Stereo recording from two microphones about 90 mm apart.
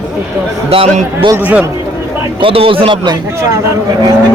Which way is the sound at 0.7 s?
90° right.